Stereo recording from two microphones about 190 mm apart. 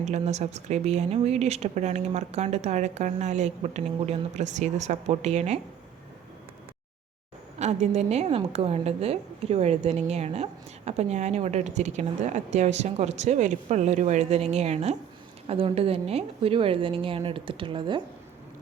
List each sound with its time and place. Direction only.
0.0 s a woman's voice: 35° right (ahead or behind)
7.6 s a woman's voice: 35° right (ahead or behind)